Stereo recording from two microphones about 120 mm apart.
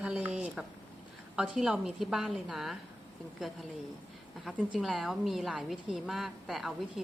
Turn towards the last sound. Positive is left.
turn(degrees=0)  # may be behind; listen again after turning